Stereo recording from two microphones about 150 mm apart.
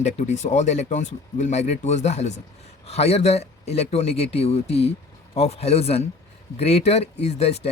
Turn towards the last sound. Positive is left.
turn(degrees=45)  # may be behind; listen again after turning